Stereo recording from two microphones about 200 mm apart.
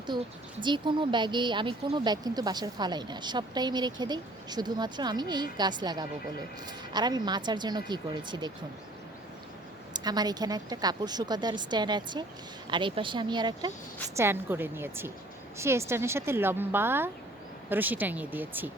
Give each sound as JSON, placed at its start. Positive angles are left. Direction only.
{"t": 0.1, "sound": "speech", "side_deg": -25}
{"t": 9.9, "sound": "a woman's voice", "side_deg": -20}